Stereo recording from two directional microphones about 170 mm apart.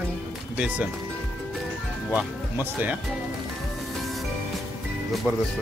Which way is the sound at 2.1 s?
10° right (ahead or behind).